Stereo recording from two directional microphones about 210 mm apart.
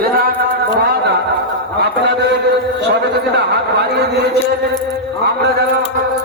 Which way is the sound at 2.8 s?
55° right (ahead or behind).